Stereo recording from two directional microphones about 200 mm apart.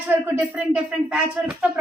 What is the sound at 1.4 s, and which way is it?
Speech, 10° right (ahead or behind).